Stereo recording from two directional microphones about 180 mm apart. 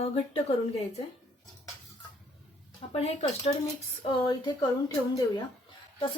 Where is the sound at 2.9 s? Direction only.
35° left (ahead or behind).